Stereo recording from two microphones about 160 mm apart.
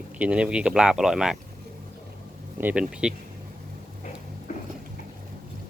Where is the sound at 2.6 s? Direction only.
10° right (ahead or behind).